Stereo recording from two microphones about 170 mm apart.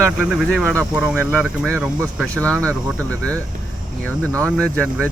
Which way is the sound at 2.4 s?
15° right (ahead or behind).